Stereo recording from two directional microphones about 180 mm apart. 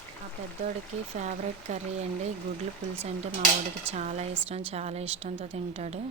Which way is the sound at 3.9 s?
40° right (ahead or behind).